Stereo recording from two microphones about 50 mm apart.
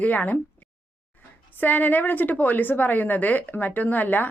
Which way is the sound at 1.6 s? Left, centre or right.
Left.